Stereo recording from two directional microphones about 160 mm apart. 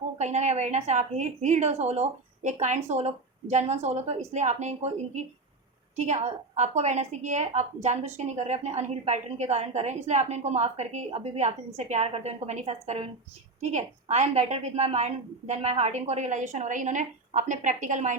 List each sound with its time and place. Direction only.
0.2 s a woman's voice: 45° right (ahead or behind)